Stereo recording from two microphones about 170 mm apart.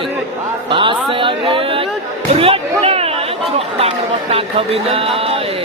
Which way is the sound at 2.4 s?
35° right (ahead or behind).